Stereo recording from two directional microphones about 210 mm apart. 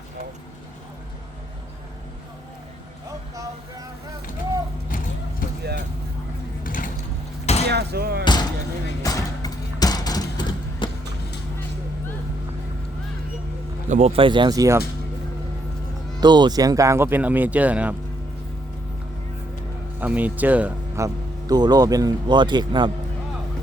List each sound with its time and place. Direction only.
3.1 s vehicle: 15° right (ahead or behind)
5.4 s vehicle: 40° left (ahead or behind)
6.7 s vehicle: 40° left (ahead or behind)
7.4 s a sound: 30° left (ahead or behind)
7.7 s a sound: 50° right (ahead or behind)
8.2 s basketball bounce: 20° left (ahead or behind)
9.0 s music: 15° left (ahead or behind)
9.8 s a sound: 20° left (ahead or behind)
13.8 s speech: 35° right (ahead or behind); by 14.8 s 15° right (ahead or behind)
16.2 s speech: 20° right (ahead or behind)
20.0 s speech: 10° right (ahead or behind)